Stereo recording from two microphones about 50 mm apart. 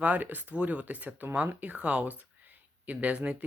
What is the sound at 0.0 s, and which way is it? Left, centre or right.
Speech, right.